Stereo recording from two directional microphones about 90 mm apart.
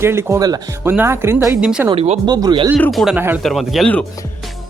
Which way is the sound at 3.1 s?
20° right (ahead or behind).